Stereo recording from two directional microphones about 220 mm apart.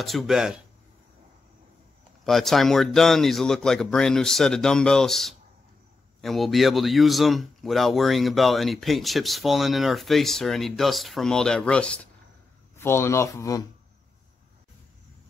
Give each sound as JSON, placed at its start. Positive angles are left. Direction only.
{"t": 0.0, "sound": "speech", "side_deg": 0}
{"t": 2.2, "sound": "speech", "side_deg": 0}